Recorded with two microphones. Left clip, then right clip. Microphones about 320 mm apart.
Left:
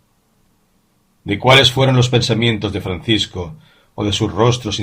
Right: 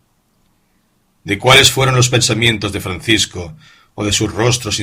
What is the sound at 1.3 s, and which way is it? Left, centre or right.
Speech, right.